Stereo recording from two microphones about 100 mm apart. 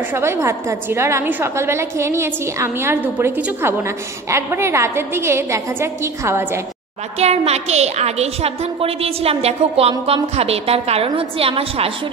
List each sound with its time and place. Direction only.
0.1 s a woman's voice: 25° right (ahead or behind)
3.6 s a woman's voice: 25° right (ahead or behind)
7.2 s a woman's voice: 90° right; by 11.9 s 70° right (ahead or behind)